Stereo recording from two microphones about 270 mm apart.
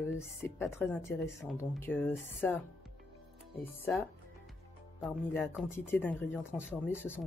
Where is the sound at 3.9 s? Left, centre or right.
Centre.